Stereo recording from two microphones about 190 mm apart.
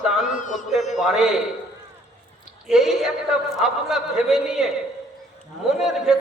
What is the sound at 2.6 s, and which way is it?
A man's voice, centre (ahead or behind).